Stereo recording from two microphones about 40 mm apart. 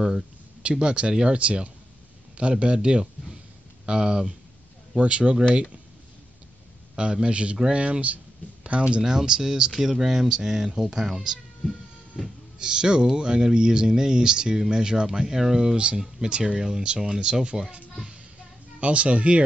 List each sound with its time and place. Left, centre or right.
0.0 s a sound: centre
0.7 s speech: right
7.0 s speech: right
9.0 s speech: centre
12.5 s speech: centre
15.7 s speech: right